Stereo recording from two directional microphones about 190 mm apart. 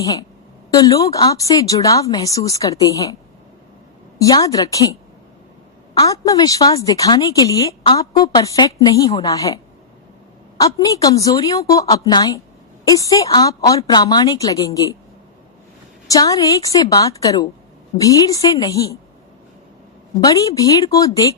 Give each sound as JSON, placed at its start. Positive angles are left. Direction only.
{"t": 0.0, "sound": "a woman's voice", "side_deg": 20}
{"t": 4.2, "sound": "a woman's voice", "side_deg": 20}
{"t": 10.6, "sound": "a woman's voice", "side_deg": 20}
{"t": 16.0, "sound": "a woman's voice", "side_deg": 20}
{"t": 20.2, "sound": "a woman's voice", "side_deg": 20}